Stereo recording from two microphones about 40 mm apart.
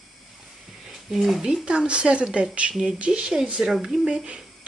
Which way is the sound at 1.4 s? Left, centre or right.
Right.